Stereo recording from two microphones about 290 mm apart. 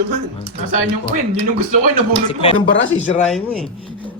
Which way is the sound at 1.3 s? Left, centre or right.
Centre.